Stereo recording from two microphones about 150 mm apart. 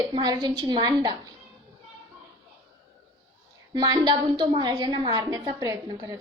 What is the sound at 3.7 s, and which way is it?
A woman's voice, 30° right (ahead or behind).